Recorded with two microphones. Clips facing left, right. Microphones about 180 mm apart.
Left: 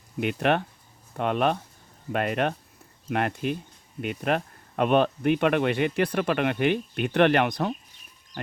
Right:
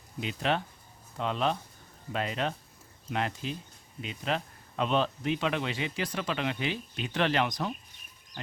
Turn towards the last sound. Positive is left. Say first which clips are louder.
# left 7 dB
turn(degrees=60)  # may be behind; listen again after turning